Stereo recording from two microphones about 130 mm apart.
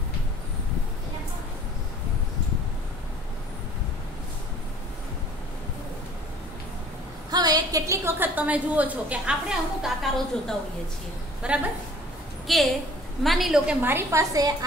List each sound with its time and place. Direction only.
7.2 s a woman's voice: 30° right (ahead or behind); by 13.7 s centre (ahead or behind)
13.7 s a woman's voice: 15° right (ahead or behind)